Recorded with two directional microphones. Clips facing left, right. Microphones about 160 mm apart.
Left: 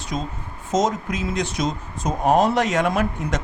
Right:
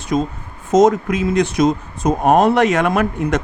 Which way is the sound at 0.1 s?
55° right (ahead or behind).